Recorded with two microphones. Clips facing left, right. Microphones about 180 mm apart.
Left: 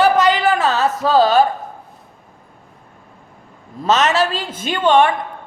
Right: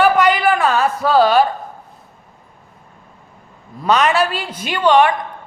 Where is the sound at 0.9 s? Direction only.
40° left (ahead or behind).